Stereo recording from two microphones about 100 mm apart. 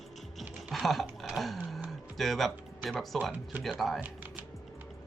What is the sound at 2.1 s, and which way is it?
Speech, centre (ahead or behind).